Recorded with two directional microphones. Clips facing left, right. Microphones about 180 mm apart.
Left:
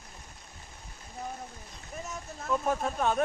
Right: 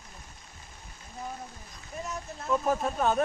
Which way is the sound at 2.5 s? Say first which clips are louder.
Right 2 dB; centre (ahead or behind).